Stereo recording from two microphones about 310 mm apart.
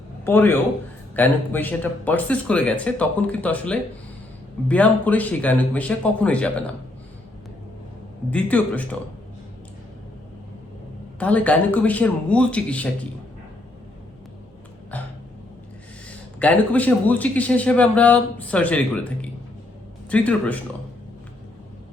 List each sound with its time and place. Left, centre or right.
0.3 s a man's voice: centre
8.3 s a man's voice: centre
11.2 s a man's voice: centre
14.9 s a sound: centre
16.0 s a man's voice: centre